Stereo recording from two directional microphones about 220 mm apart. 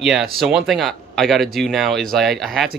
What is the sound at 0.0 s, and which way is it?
Speech, centre (ahead or behind).